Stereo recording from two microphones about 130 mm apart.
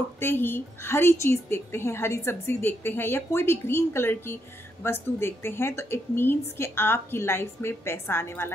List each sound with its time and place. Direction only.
0.2 s a woman's voice: 15° left (ahead or behind)